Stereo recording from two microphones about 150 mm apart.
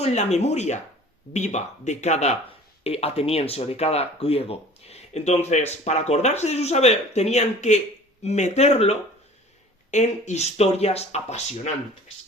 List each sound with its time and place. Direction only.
0.0 s speech: 45° left (ahead or behind)